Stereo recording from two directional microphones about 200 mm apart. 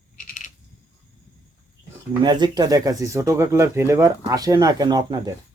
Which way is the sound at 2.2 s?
20° right (ahead or behind).